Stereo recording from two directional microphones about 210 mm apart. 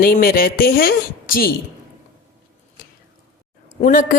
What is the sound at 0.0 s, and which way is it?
Speech, 45° left (ahead or behind).